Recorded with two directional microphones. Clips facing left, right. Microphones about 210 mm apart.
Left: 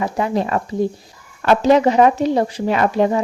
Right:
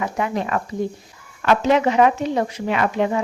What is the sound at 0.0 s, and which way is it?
Speech, 35° left (ahead or behind).